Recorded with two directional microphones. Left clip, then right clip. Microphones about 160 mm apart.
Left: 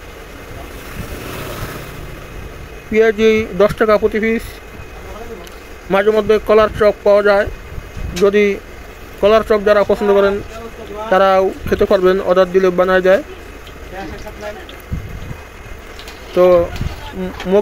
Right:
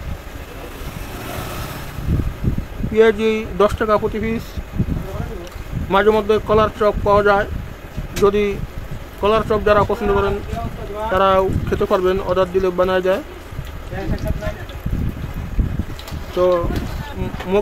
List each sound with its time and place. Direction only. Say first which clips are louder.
2.9 s speech: left 3 dB; 15° left (ahead or behind)
5.9 s speech: left 2 dB; 10° left (ahead or behind)
16.3 s speech: left 6 dB; 25° left (ahead or behind)